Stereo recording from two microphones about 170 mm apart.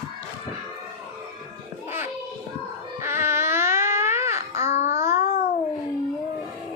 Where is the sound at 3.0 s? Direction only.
15° right (ahead or behind).